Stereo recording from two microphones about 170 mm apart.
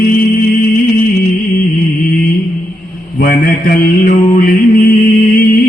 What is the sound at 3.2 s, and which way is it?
Mantra, 60° left (ahead or behind).